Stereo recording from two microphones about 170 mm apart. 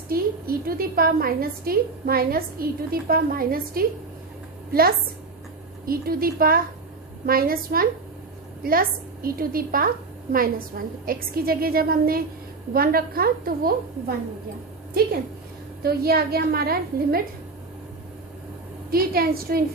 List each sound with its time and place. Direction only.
0.1 s a woman's voice: 60° right (ahead or behind)
15.0 s a woman's voice: 65° right (ahead or behind)
18.9 s a woman's voice: 60° right (ahead or behind)